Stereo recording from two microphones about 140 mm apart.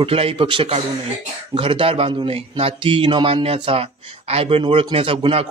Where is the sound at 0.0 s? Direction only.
40° right (ahead or behind).